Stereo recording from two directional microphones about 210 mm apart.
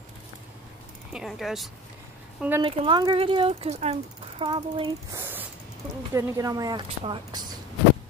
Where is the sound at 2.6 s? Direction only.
25° right (ahead or behind).